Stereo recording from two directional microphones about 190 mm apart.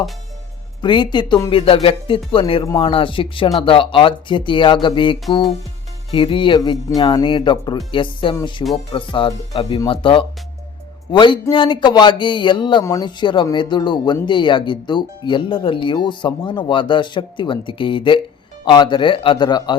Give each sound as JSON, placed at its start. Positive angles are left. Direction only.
{"t": 0.8, "sound": "a man's voice", "side_deg": 25}